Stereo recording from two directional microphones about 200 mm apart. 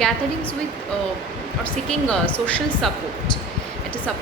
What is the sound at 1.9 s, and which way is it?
Speech, 5° left (ahead or behind).